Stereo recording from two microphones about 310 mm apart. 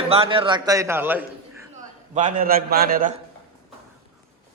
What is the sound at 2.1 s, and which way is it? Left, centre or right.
Speech, right.